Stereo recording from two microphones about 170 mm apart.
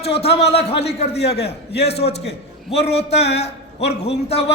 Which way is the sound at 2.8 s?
40° left (ahead or behind).